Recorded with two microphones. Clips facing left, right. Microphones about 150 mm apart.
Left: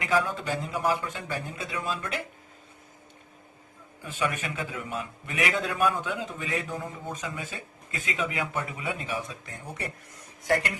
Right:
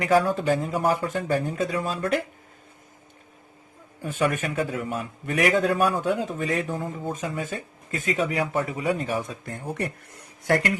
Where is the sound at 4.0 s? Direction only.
45° right (ahead or behind).